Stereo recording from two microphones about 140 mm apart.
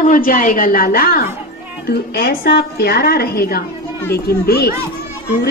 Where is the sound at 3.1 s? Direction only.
90° left.